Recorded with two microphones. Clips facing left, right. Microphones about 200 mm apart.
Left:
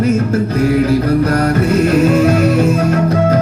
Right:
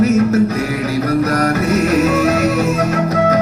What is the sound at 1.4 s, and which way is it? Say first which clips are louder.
Music: left 2 dB; 30° left (ahead or behind).